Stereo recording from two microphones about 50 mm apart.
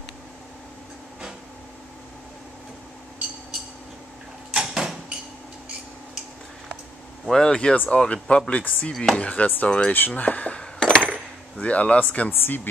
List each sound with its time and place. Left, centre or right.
4.5 s door: centre
7.2 s speech: centre
7.7 s speech: left
8.9 s speech: centre
9.2 s speech: left
9.7 s speech: left
9.9 s speech: left
10.6 s a sound: centre
12.3 s speech: left